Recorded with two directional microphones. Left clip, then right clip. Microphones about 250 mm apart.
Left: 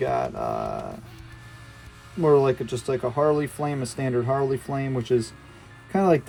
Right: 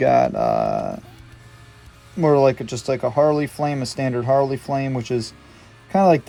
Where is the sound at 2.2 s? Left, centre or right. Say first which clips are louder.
Right 3 dB; right.